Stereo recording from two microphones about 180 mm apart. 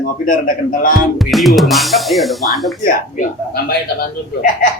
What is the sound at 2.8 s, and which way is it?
Speech, 55° left (ahead or behind).